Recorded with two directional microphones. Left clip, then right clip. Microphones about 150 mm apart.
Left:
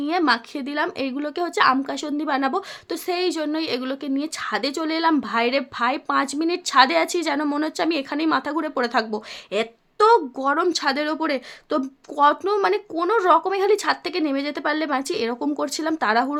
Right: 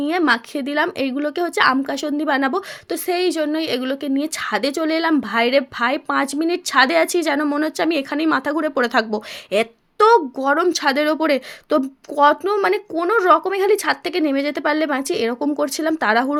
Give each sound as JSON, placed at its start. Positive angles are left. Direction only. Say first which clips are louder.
{"t": 0.0, "sound": "speech", "louder": "right 3 dB", "side_deg": -25}